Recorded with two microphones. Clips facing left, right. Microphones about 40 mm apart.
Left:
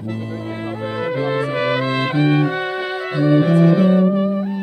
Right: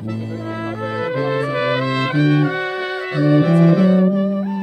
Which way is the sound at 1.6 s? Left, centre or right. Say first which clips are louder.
Even; centre.